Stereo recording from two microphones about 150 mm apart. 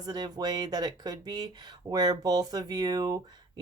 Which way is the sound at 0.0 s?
25° right (ahead or behind).